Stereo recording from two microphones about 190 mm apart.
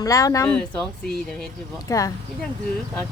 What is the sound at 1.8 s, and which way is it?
Speech, 20° left (ahead or behind).